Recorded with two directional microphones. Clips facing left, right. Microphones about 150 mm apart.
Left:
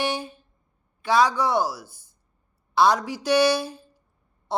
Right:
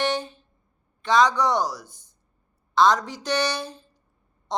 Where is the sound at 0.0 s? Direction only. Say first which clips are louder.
Right 2 dB; 10° left (ahead or behind).